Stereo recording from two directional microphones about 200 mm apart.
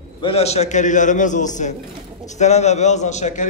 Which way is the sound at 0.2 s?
30° left (ahead or behind).